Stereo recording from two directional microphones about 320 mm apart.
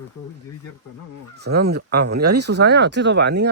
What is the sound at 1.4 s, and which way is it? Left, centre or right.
Speech, right.